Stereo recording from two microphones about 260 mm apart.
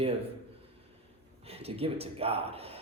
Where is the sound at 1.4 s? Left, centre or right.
Right.